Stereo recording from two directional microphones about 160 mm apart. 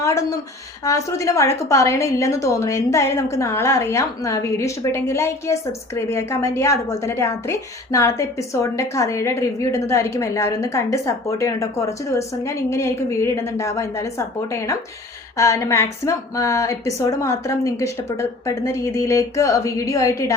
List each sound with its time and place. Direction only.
0.0 s a woman's voice: 20° left (ahead or behind)
15.4 s a woman's voice: 20° left (ahead or behind)